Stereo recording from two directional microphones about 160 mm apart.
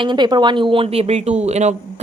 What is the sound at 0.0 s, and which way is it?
Speech, 30° right (ahead or behind).